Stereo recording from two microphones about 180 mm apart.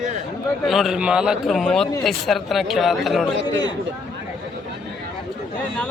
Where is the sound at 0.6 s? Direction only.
Centre (ahead or behind).